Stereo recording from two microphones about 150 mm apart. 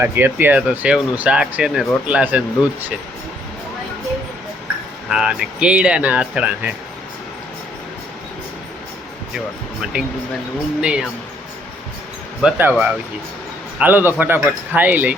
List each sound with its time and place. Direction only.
0.0 s speech: 15° right (ahead or behind)
5.0 s speech: 5° right (ahead or behind)
9.9 s speech: 10° right (ahead or behind)
12.4 s speech: 10° right (ahead or behind)
13.7 s speech: 10° right (ahead or behind)